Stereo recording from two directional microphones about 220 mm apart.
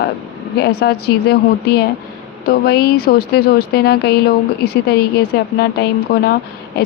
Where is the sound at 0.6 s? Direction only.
45° left (ahead or behind).